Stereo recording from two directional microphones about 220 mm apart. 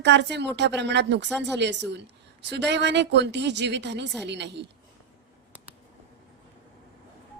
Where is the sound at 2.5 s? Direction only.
50° right (ahead or behind).